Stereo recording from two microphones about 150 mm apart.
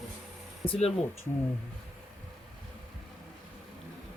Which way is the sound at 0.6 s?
35° left (ahead or behind).